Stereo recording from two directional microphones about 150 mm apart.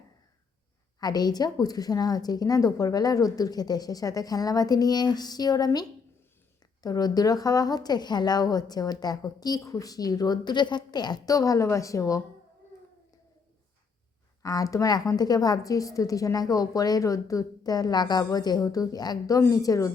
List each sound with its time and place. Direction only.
0.9 s a woman's voice: 25° left (ahead or behind)
6.8 s a woman's voice: 25° left (ahead or behind)
14.4 s a woman's voice: 25° left (ahead or behind)